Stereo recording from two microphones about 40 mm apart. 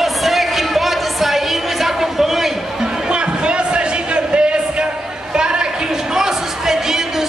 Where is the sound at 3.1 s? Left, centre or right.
Right.